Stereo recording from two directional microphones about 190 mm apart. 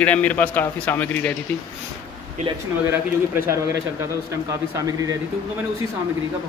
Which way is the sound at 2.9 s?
10° right (ahead or behind).